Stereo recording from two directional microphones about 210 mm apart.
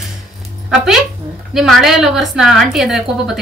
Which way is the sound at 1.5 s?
Centre (ahead or behind).